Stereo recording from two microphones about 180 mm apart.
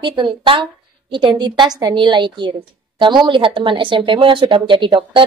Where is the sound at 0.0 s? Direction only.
25° right (ahead or behind).